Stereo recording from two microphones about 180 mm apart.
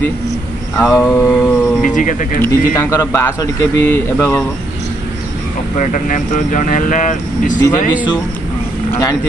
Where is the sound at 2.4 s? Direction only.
15° left (ahead or behind).